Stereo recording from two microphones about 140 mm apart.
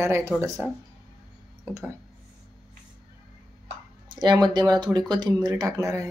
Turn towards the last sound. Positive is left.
turn(degrees=-25)  # may be behind; listen again after turning